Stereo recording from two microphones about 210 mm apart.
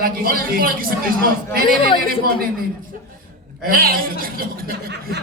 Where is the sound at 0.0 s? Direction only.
45° right (ahead or behind).